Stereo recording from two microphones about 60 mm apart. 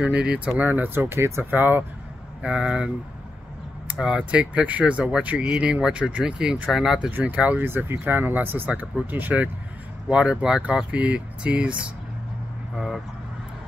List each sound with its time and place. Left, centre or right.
0.0 s speech: centre
0.6 s speech: right
1.5 s speech: right
2.4 s speech: centre
3.8 s a sound: right
4.3 s speech: right
7.1 s speech: right
7.6 s speech: right
10.0 s speech: centre
12.7 s speech: centre